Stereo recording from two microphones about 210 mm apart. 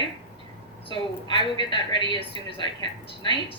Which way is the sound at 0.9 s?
25° left (ahead or behind).